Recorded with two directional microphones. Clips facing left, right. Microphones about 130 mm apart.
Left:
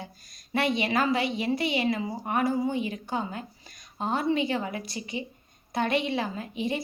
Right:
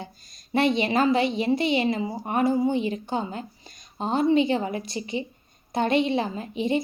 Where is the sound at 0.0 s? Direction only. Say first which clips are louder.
Right 3 dB; 25° right (ahead or behind).